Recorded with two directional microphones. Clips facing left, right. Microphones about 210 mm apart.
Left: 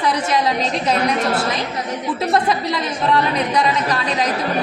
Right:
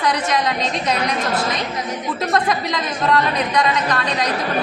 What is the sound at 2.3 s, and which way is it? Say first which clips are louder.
Speech: left 1 dB; 30° left (ahead or behind).